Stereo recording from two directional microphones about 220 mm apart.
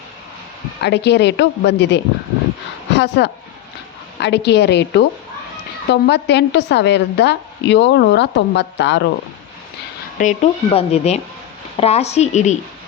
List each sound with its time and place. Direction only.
0.8 s a woman's voice: 50° left (ahead or behind)
10.2 s speech: 30° left (ahead or behind)